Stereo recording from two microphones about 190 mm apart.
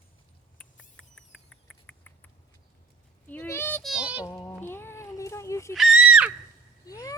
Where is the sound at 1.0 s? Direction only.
5° left (ahead or behind).